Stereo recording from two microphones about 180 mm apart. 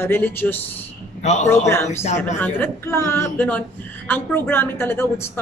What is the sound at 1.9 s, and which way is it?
Speech, 35° left (ahead or behind).